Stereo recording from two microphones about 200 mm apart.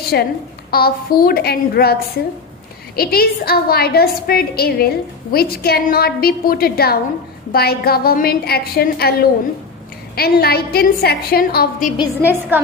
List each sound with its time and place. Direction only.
0.1 s a woman's voice: 55° left (ahead or behind)
10.2 s a woman's voice: 50° left (ahead or behind)
12.2 s a woman's voice: 10° right (ahead or behind)